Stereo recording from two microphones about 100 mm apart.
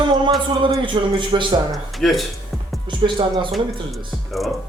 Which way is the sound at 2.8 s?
55° right (ahead or behind).